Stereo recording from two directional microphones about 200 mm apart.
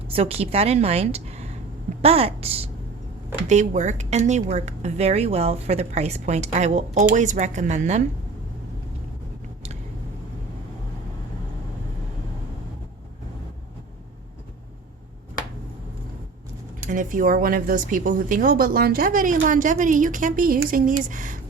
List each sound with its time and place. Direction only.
0.1 s a woman's voice: 30° right (ahead or behind)
16.8 s speech: 40° right (ahead or behind)